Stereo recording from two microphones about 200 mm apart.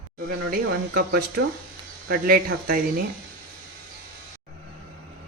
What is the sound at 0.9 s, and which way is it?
Speech, 50° right (ahead or behind).